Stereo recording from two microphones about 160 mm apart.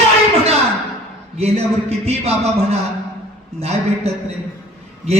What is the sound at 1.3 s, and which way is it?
Speech, 40° right (ahead or behind).